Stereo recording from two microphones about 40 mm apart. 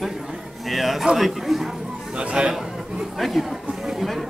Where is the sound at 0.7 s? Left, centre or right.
Centre.